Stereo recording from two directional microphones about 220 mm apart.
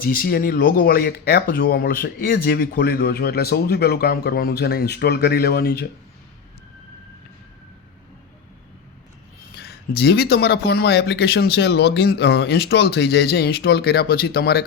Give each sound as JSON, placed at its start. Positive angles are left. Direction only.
{"t": 0.0, "sound": "speech", "side_deg": 40}
{"t": 9.6, "sound": "speech", "side_deg": 45}